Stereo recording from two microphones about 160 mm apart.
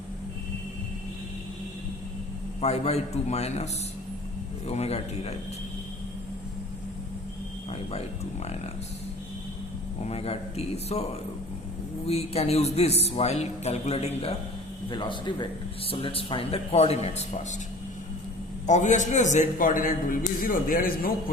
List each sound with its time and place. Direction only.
2.6 s speech: 40° left (ahead or behind)
7.7 s speech: 40° left (ahead or behind)
10.1 s speech: 40° left (ahead or behind)
12.0 s speech: 40° left (ahead or behind)
14.8 s speech: 30° left (ahead or behind)
18.6 s a man's voice: 50° left (ahead or behind)